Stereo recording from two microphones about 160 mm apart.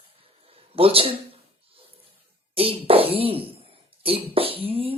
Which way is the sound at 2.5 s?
35° right (ahead or behind).